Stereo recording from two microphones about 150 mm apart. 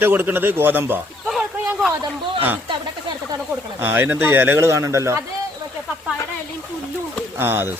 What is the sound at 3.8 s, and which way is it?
Speech, 15° right (ahead or behind).